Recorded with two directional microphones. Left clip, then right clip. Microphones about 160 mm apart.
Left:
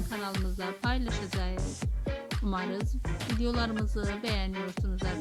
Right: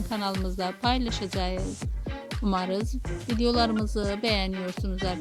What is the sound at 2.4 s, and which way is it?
Speech, 40° right (ahead or behind).